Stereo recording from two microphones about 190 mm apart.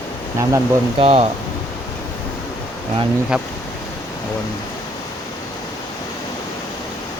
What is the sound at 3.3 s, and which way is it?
Speech, 5° right (ahead or behind).